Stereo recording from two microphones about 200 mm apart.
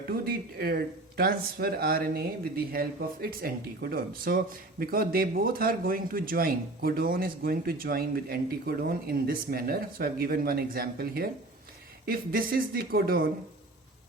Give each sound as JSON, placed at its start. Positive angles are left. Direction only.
{"t": 0.6, "sound": "speech", "side_deg": -50}